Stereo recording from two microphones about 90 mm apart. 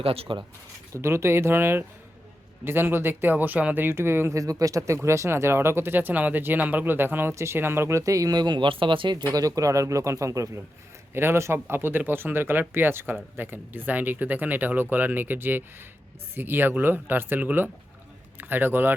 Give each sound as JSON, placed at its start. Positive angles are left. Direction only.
{"t": 0.0, "sound": "speech", "side_deg": -90}
{"t": 0.9, "sound": "speech", "side_deg": -30}
{"t": 9.3, "sound": "a man's voice", "side_deg": -40}